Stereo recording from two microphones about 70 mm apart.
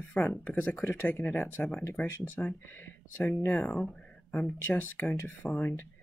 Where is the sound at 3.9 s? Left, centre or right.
Centre.